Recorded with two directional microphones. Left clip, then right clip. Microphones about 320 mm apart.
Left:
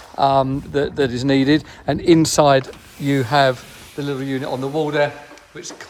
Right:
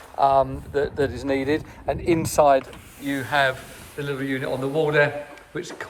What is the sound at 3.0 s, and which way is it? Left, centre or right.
A man's voice, centre.